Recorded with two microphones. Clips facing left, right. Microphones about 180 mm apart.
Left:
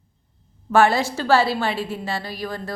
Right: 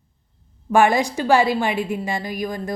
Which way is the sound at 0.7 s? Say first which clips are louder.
Right 1 dB; 15° right (ahead or behind).